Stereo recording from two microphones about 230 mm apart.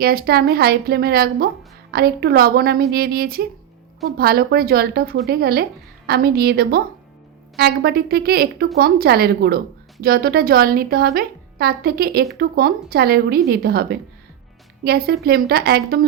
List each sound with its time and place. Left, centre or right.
0.0 s a woman's voice: right